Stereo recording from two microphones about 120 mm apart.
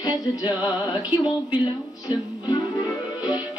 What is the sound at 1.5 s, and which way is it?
Speech, 35° left (ahead or behind).